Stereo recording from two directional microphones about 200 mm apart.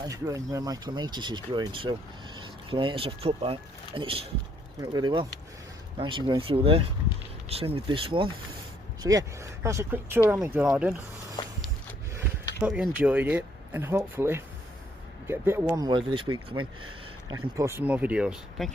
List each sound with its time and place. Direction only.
0.0 s speech: 15° right (ahead or behind)
12.1 s speech: 10° right (ahead or behind)